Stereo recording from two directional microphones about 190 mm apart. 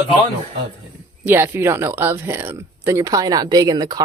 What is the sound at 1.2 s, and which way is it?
Speech, 10° right (ahead or behind).